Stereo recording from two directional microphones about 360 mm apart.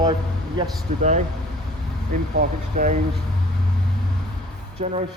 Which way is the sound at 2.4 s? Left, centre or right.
Right.